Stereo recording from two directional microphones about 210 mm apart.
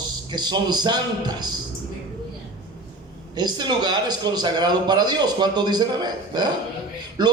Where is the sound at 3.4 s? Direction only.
20° right (ahead or behind).